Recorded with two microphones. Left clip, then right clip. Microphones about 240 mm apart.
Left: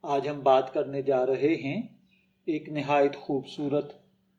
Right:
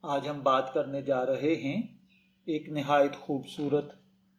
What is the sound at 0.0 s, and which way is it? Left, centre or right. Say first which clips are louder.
Speech: left 3 dB; right.